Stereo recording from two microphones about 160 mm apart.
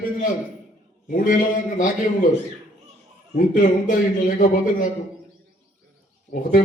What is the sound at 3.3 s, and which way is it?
A man's voice, 55° left (ahead or behind).